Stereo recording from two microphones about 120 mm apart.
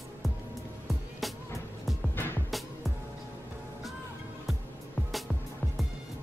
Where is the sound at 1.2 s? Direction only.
Centre (ahead or behind).